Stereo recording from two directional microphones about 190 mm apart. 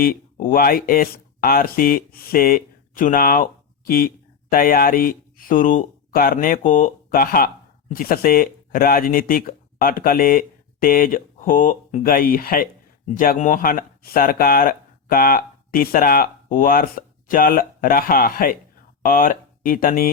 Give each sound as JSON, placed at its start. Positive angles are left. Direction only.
{"t": 0.0, "sound": "speech", "side_deg": 45}